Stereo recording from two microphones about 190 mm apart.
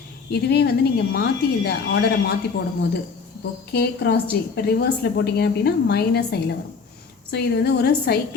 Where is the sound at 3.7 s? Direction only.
60° left (ahead or behind).